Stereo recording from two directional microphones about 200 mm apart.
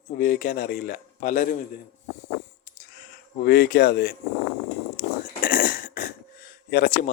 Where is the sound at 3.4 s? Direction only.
50° left (ahead or behind).